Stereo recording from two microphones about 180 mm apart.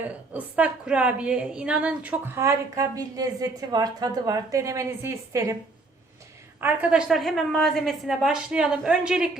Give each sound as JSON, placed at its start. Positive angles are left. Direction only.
{"t": 0.1, "sound": "a woman's voice", "side_deg": -10}
{"t": 6.6, "sound": "a woman's voice", "side_deg": -10}